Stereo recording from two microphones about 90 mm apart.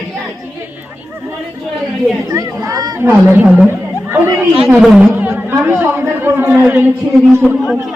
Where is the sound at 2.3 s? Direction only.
40° right (ahead or behind).